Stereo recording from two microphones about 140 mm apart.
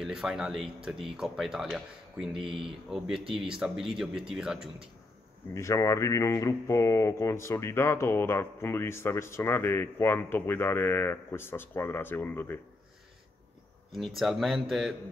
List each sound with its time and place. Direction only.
0.0 s speech: 5° right (ahead or behind)
5.5 s speech: 20° left (ahead or behind)
13.9 s speech: centre (ahead or behind)